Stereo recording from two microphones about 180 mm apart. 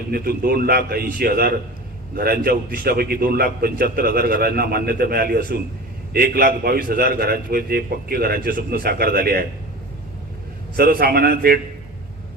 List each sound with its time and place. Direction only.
0.1 s a man's voice: 55° right (ahead or behind)
10.8 s a man's voice: 55° right (ahead or behind)